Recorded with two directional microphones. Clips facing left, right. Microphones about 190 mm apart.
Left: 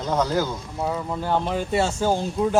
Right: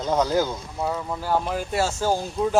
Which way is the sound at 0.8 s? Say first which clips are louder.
Left 1 dB; 5° left (ahead or behind).